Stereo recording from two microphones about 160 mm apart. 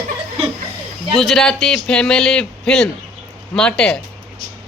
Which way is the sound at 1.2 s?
Centre (ahead or behind).